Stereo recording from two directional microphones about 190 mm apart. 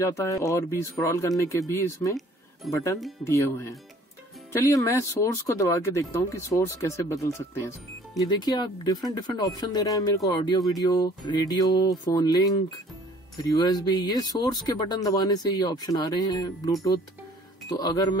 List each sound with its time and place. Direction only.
0.0 s speech: 15° left (ahead or behind)